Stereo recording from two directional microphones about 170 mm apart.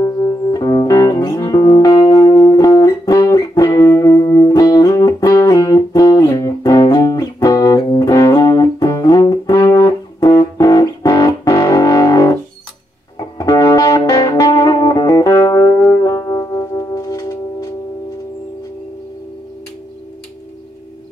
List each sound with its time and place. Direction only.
0.0 s music: 20° left (ahead or behind)
13.4 s music: 20° left (ahead or behind)